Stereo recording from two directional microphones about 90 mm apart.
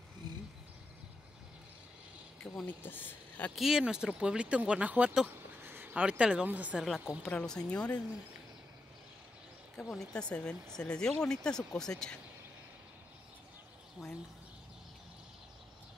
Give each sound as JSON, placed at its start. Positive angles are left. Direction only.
{"t": 2.4, "sound": "speech", "side_deg": 10}
{"t": 2.8, "sound": "speech", "side_deg": 20}
{"t": 3.5, "sound": "speech", "side_deg": -5}
{"t": 5.3, "sound": "a sound", "side_deg": -25}
{"t": 6.0, "sound": "speech", "side_deg": -10}
{"t": 6.8, "sound": "a woman's voice", "side_deg": 0}
{"t": 7.2, "sound": "speech", "side_deg": 10}
{"t": 9.8, "sound": "speech", "side_deg": 5}
{"t": 14.0, "sound": "bird", "side_deg": 0}